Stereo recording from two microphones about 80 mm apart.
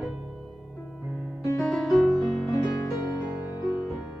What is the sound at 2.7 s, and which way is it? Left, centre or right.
Music, left.